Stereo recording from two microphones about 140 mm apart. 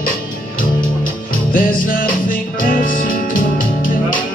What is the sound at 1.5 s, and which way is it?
Music, 85° left.